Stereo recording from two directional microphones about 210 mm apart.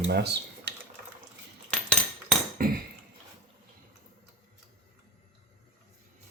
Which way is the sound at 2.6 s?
45° right (ahead or behind).